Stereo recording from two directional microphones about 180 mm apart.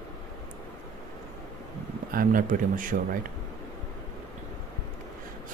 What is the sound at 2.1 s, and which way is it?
Speech, 50° right (ahead or behind).